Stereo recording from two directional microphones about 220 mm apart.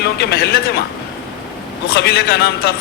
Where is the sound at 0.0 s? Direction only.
50° left (ahead or behind).